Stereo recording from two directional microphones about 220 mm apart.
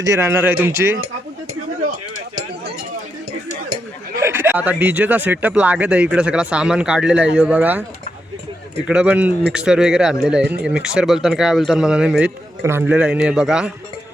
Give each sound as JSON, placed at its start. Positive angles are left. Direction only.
{"t": 0.0, "sound": "a man's voice", "side_deg": -15}
{"t": 4.2, "sound": "speech", "side_deg": -10}
{"t": 8.9, "sound": "speech", "side_deg": -5}